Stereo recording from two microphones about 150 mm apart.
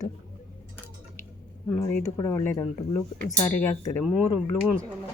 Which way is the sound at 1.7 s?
10° left (ahead or behind).